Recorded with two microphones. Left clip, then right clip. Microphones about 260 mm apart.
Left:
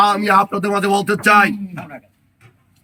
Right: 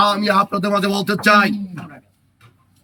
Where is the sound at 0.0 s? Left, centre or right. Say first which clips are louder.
Left 2 dB; centre.